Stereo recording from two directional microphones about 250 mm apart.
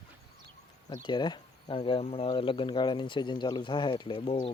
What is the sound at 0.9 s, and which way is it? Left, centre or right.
Speech, centre.